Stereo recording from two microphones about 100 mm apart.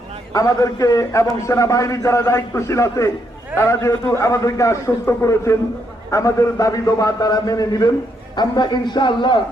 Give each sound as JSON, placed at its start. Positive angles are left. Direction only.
{"t": 0.3, "sound": "a man's voice", "side_deg": 35}